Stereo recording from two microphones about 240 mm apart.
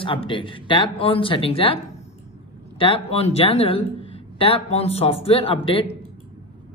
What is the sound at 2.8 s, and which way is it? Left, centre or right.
Speech, left.